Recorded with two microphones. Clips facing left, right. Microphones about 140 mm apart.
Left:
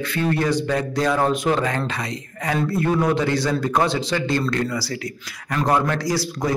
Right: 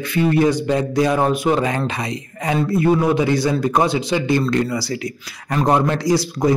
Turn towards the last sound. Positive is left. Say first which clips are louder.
# right 6 dB
turn(degrees=-20)  # may be behind; listen again after turning